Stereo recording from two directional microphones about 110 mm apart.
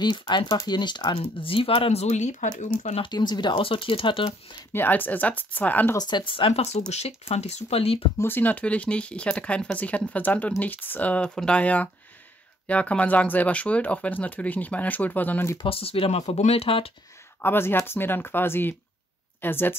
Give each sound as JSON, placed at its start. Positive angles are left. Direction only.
{"t": 0.0, "sound": "speech", "side_deg": 45}
{"t": 1.1, "sound": "speech", "side_deg": 55}
{"t": 3.0, "sound": "speech", "side_deg": 40}
{"t": 4.7, "sound": "speech", "side_deg": 15}
{"t": 5.9, "sound": "speech", "side_deg": 40}
{"t": 8.2, "sound": "speech", "side_deg": 15}
{"t": 15.5, "sound": "speech", "side_deg": 55}
{"t": 16.6, "sound": "speech", "side_deg": 55}
{"t": 17.4, "sound": "speech", "side_deg": 20}